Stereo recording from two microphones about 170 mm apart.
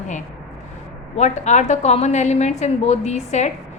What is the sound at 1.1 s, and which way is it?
A woman's voice, 45° left (ahead or behind).